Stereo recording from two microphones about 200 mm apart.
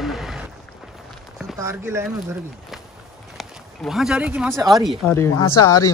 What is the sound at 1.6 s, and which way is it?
Speech, 15° right (ahead or behind).